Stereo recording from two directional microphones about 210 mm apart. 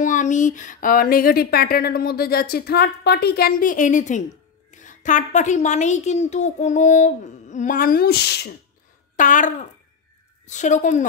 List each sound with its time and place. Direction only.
0.0 s a woman's voice: 35° left (ahead or behind)
9.1 s a woman's voice: 40° left (ahead or behind)